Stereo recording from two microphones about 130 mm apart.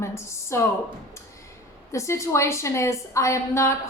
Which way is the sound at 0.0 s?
20° left (ahead or behind).